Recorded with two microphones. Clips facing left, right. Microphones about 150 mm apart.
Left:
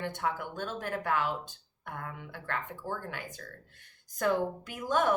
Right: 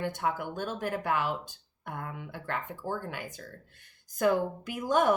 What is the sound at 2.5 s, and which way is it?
A woman's voice, 10° right (ahead or behind).